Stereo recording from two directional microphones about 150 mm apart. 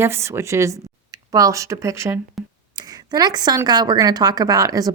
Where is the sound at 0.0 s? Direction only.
15° right (ahead or behind).